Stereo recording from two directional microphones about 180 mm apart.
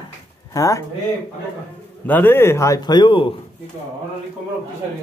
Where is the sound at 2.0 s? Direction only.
10° left (ahead or behind).